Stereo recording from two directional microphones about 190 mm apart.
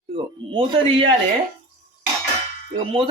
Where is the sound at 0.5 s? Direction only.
25° right (ahead or behind).